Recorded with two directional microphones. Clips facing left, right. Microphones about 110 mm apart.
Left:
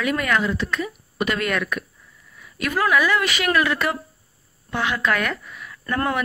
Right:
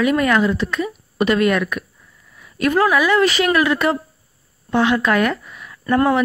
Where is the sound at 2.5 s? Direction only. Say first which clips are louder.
Right 5 dB; 30° right (ahead or behind).